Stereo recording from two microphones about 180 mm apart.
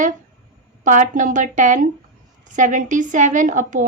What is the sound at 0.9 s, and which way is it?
A woman's voice, 45° right (ahead or behind).